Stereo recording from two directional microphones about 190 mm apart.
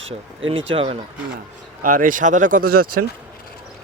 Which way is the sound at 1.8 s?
45° right (ahead or behind).